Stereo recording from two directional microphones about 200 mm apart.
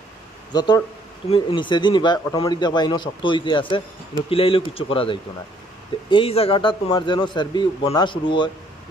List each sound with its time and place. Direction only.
0.5 s a man's voice: 20° left (ahead or behind)